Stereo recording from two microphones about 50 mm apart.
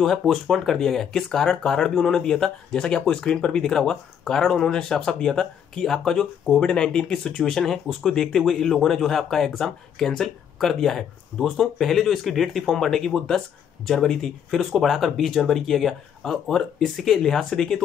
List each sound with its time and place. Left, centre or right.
0.0 s speech: centre